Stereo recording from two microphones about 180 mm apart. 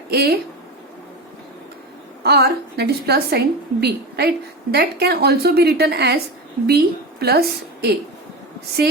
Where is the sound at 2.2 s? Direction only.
65° right (ahead or behind).